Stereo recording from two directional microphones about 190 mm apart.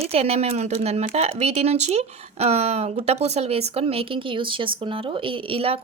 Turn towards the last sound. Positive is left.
turn(degrees=-30)  # may be behind; listen again after turning